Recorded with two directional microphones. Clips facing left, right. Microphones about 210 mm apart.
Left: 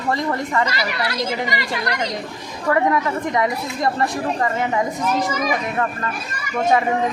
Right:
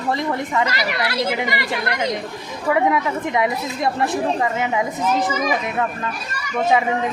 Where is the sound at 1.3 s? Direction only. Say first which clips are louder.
Right 1 dB; 55° right (ahead or behind).